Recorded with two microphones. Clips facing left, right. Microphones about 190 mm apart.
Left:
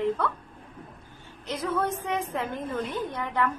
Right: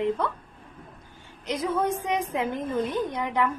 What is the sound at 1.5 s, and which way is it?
A woman's voice, 15° right (ahead or behind).